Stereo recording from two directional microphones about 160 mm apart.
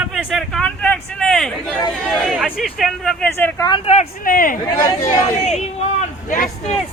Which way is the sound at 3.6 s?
35° left (ahead or behind).